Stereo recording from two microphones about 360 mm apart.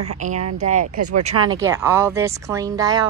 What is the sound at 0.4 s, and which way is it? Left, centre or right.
Speech, right.